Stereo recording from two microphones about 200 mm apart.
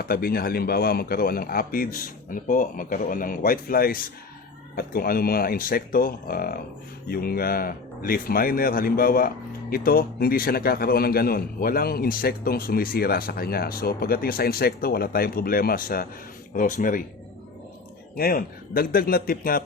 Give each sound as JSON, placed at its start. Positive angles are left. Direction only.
{"t": 0.0, "sound": "speech", "side_deg": 50}
{"t": 18.2, "sound": "speech", "side_deg": 45}